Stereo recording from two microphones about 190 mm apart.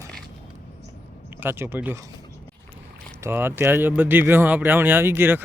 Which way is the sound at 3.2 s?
10° right (ahead or behind).